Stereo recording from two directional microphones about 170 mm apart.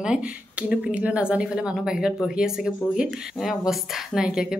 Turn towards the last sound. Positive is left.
turn(degrees=-5)  # may be behind; listen again after turning